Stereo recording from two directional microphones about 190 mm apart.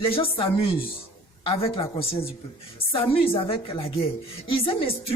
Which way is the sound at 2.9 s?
30° left (ahead or behind).